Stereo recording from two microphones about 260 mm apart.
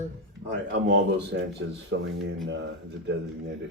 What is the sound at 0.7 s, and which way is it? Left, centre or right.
Speech, right.